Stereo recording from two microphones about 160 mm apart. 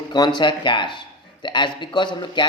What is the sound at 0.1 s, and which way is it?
Speech, 25° left (ahead or behind).